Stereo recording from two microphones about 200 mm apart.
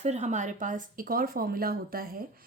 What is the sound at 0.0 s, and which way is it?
A woman's voice, 35° right (ahead or behind).